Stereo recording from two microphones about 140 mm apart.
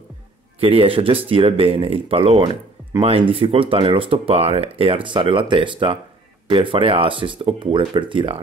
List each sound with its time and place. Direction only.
0.6 s speech: 45° right (ahead or behind)